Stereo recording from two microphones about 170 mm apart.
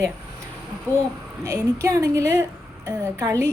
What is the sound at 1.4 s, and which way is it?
A woman's voice, 15° right (ahead or behind).